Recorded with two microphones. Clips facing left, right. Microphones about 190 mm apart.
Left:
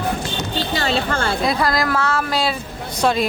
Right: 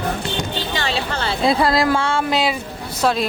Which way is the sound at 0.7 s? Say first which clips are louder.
Left 4 dB; 45° left (ahead or behind).